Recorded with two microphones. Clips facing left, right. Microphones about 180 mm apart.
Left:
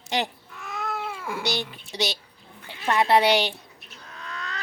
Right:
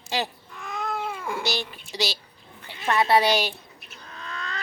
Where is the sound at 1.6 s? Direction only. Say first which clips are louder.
Left 1 dB; 20° left (ahead or behind).